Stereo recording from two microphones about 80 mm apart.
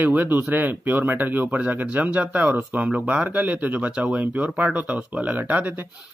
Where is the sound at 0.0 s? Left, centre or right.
Right.